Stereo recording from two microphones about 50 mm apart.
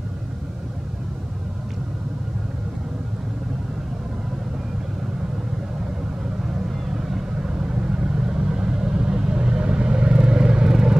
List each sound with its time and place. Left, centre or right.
7.0 s vehicle: centre